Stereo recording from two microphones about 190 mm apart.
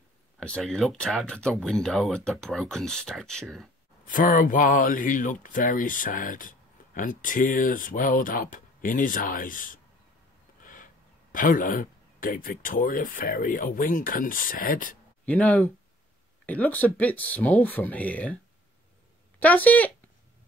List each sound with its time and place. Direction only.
0.4 s speech: 5° left (ahead or behind)
4.0 s speech: 45° left (ahead or behind)
10.6 s a sound: 45° left (ahead or behind)
11.3 s speech: 45° left (ahead or behind)
15.2 s speech: 10° left (ahead or behind)
19.4 s speech: 10° left (ahead or behind)